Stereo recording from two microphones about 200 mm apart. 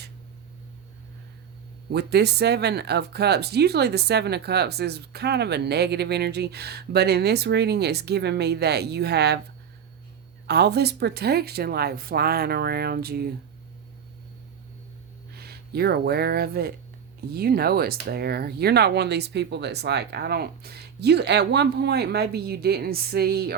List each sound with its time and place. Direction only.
1.9 s speech: 55° right (ahead or behind)
10.4 s speech: 55° right (ahead or behind)
15.3 s speech: 50° right (ahead or behind)